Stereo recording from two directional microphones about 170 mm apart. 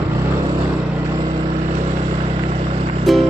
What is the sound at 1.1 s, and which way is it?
Vehicle, 25° right (ahead or behind).